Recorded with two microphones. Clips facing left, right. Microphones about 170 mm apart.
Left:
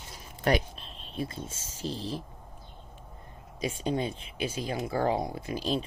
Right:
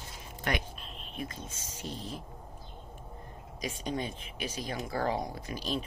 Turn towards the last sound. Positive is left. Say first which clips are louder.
# left 5 dB
turn(degrees=30)  # may be behind; listen again after turning